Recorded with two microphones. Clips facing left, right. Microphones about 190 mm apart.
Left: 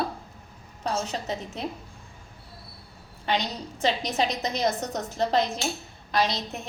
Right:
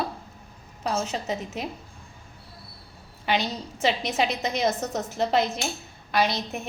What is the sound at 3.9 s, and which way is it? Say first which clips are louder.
Speech: right 1 dB; 5° right (ahead or behind).